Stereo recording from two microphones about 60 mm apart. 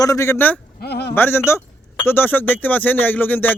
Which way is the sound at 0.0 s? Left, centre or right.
Left.